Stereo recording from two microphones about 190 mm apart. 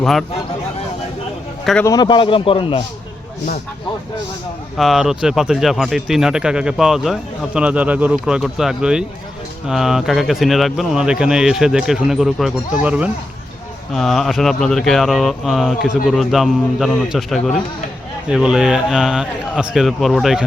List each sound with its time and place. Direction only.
0.0 s speech: centre (ahead or behind)
1.8 s a man's voice: 20° left (ahead or behind)
4.8 s speech: centre (ahead or behind)